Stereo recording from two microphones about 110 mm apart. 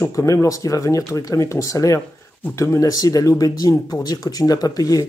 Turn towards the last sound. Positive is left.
turn(degrees=35)  # may be behind; listen again after turning